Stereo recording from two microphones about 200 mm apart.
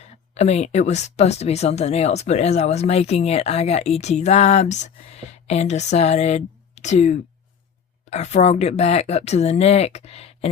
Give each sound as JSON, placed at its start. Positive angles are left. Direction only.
{"t": 0.0, "sound": "speech", "side_deg": 35}